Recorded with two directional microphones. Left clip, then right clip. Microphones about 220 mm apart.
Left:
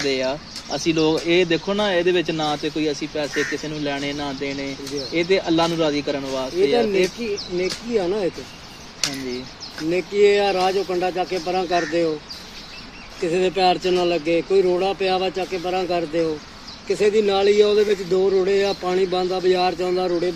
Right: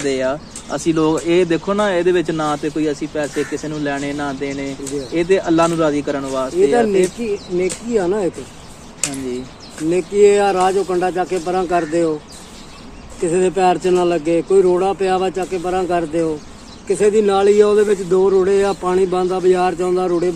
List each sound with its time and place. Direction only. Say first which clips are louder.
0.0 s speech: right 3 dB; 20° left (ahead or behind)
7.9 s a man's voice: right 4 dB; 5° left (ahead or behind)
9.0 s speech: even; 55° right (ahead or behind)
9.8 s a man's voice: right 5 dB; centre (ahead or behind)
13.2 s a man's voice: right 4 dB; 5° left (ahead or behind)